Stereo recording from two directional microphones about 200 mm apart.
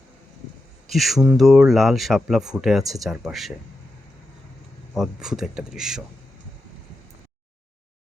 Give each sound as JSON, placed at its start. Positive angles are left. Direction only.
{"t": 0.9, "sound": "speech", "side_deg": 0}
{"t": 4.9, "sound": "speech", "side_deg": 0}